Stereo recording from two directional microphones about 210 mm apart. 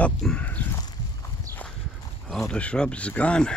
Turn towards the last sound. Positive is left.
turn(degrees=5)  # may be behind; listen again after turning